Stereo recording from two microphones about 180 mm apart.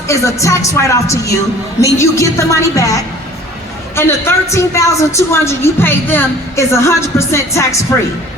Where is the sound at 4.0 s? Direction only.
15° left (ahead or behind).